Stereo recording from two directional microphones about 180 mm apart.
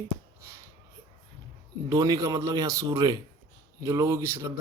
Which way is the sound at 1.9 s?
20° right (ahead or behind).